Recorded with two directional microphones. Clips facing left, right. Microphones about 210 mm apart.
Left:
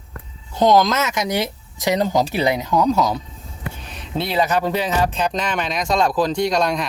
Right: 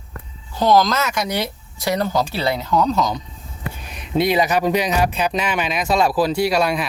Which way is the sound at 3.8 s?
10° right (ahead or behind).